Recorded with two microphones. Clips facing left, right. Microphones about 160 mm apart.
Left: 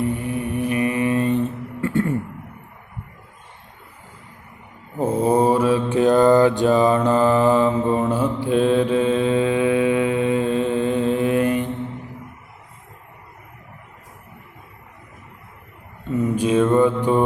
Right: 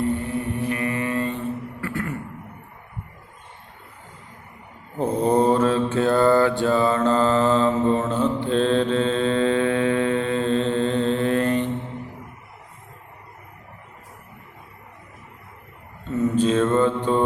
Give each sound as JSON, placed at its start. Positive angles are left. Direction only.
{"t": 0.0, "sound": "music", "side_deg": 15}
{"t": 4.9, "sound": "mantra", "side_deg": 5}
{"t": 16.1, "sound": "mantra", "side_deg": 15}